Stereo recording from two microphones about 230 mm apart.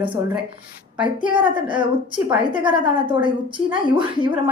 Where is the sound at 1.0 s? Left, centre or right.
Right.